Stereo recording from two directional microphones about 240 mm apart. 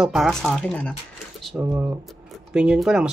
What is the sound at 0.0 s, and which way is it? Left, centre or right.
Speech, centre.